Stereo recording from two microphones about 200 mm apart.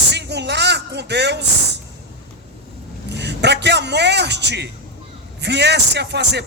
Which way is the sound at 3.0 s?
60° right (ahead or behind).